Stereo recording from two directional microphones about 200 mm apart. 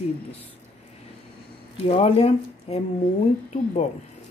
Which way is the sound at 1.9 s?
30° left (ahead or behind).